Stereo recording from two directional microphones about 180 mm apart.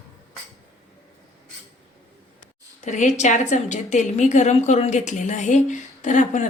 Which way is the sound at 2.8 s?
40° left (ahead or behind).